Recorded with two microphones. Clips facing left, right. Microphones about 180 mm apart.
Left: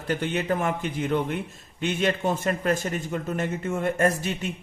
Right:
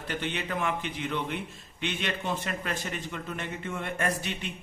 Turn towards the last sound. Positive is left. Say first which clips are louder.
# left 7 dB
turn(degrees=45)  # may be behind; listen again after turning